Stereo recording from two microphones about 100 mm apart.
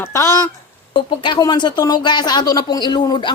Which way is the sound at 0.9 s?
55° left (ahead or behind).